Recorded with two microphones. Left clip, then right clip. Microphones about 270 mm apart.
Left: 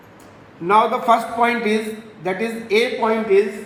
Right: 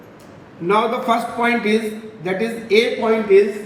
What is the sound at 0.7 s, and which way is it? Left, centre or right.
A man's voice, left.